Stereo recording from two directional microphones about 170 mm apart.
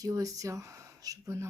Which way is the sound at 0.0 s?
20° right (ahead or behind).